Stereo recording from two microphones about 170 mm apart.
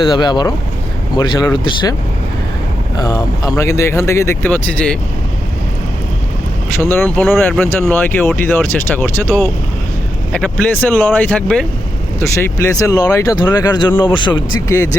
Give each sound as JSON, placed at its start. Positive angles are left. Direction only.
{"t": 0.0, "sound": "speech", "side_deg": 25}
{"t": 3.0, "sound": "speech", "side_deg": 20}
{"t": 6.7, "sound": "speech", "side_deg": 15}